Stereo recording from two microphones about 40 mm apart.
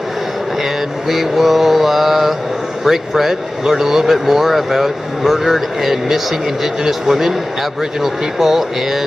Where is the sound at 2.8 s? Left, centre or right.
Centre.